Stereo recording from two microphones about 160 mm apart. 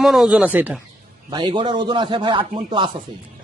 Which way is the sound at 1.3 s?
30° right (ahead or behind).